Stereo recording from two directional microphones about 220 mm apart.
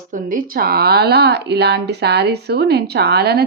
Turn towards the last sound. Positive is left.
turn(degrees=-45)  # may be behind; listen again after turning